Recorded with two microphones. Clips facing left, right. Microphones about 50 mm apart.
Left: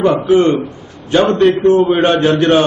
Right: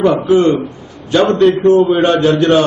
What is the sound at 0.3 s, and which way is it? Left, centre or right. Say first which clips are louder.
Speech: even; left.